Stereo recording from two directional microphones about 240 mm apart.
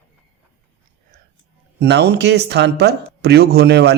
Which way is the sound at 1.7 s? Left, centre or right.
Right.